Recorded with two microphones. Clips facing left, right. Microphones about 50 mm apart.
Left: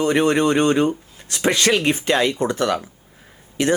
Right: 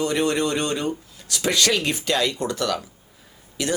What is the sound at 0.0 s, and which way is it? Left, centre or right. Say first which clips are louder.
Speech: left 5 dB; left.